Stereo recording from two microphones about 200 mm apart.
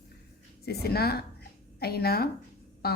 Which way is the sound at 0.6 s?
50° left (ahead or behind).